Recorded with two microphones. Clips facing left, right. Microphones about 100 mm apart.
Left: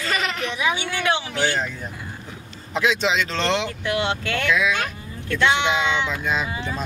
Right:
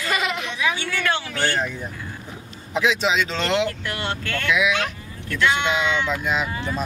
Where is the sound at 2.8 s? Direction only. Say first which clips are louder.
Even; 5° right (ahead or behind).